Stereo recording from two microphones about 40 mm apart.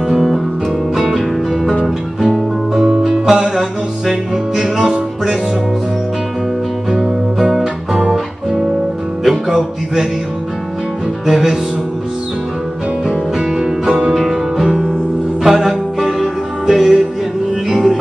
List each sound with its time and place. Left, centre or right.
0.1 s music: centre
6.9 s music: centre
11.2 s music: centre
13.1 s music: centre
14.1 s music: centre